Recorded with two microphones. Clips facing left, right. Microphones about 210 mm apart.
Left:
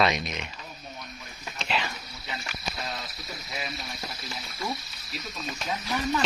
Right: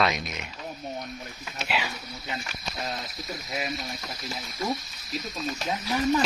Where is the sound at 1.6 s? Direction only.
5° right (ahead or behind).